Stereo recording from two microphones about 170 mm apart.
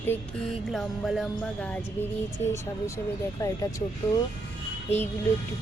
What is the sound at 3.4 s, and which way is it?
Speech, 20° left (ahead or behind).